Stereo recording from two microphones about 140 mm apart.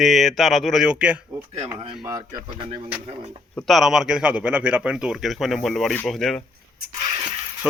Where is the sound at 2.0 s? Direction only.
30° right (ahead or behind).